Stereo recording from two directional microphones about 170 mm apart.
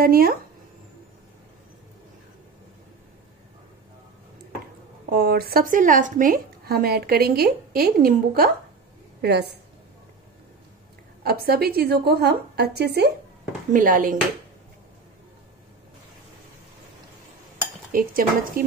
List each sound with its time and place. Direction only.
0.0 s a woman's voice: 60° right (ahead or behind)
5.1 s a woman's voice: 60° right (ahead or behind)
9.2 s a woman's voice: 75° right (ahead or behind)
11.2 s a woman's voice: 65° right (ahead or behind)
13.7 s speech: 50° right (ahead or behind)
17.9 s a woman's voice: 55° right (ahead or behind)